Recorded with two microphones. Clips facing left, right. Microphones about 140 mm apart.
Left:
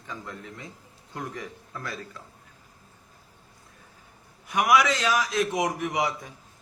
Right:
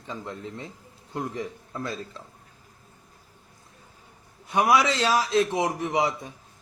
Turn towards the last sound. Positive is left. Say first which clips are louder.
# right 2 dB
turn(degrees=-25)  # may be behind; listen again after turning